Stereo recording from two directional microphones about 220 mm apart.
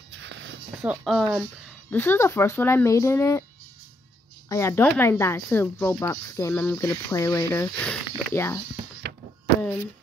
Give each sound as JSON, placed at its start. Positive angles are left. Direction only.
{"t": 0.1, "sound": "a sound", "side_deg": -55}
{"t": 0.7, "sound": "speech", "side_deg": 0}
{"t": 1.9, "sound": "speech", "side_deg": 10}
{"t": 4.5, "sound": "speech", "side_deg": 10}